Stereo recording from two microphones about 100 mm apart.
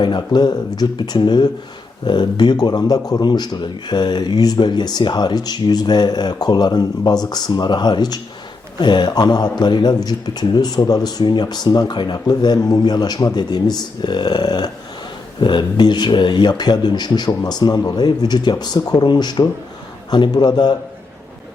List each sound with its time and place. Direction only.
0.3 s speech: 45° left (ahead or behind)